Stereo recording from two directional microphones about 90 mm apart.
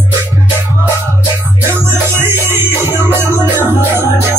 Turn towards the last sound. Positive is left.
turn(degrees=-25)  # may be behind; listen again after turning